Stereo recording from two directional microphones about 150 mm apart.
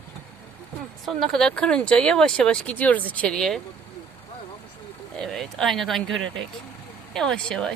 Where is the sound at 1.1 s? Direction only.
Centre (ahead or behind).